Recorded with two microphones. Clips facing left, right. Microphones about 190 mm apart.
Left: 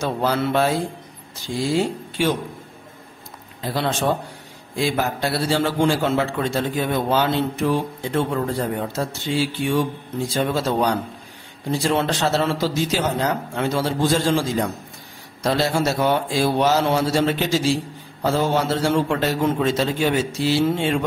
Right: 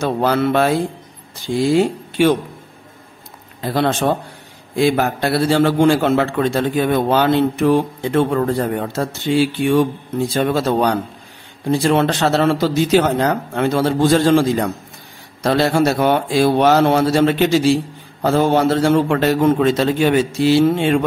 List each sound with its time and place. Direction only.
0.0 s a man's voice: 60° right (ahead or behind)
3.6 s a man's voice: 55° right (ahead or behind)
15.4 s a man's voice: 60° right (ahead or behind)